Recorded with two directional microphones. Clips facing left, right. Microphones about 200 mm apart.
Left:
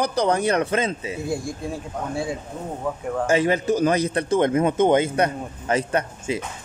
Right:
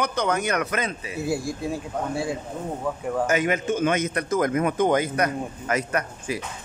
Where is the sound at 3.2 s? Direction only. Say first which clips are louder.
Left 5 dB; 30° left (ahead or behind).